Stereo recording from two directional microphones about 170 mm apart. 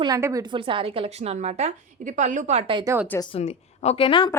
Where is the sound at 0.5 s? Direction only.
30° right (ahead or behind).